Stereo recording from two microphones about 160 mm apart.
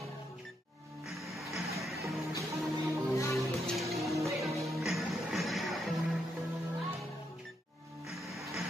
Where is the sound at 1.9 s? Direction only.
20° right (ahead or behind).